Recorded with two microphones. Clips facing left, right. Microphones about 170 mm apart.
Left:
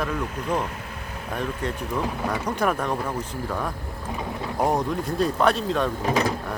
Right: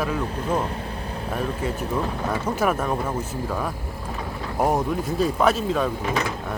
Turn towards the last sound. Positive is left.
turn(degrees=40)  # may be behind; listen again after turning